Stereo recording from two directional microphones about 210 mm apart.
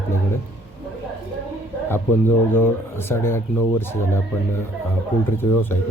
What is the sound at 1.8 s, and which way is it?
Speech, 10° left (ahead or behind).